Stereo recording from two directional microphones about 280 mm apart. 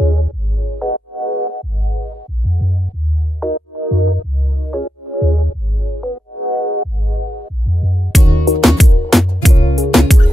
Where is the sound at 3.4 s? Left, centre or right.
Centre.